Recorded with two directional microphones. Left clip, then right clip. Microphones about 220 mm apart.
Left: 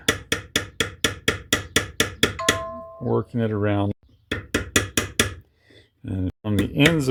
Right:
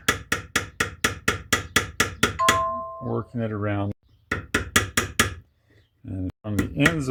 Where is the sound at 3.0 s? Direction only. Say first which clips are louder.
Left 10 dB; 40° left (ahead or behind).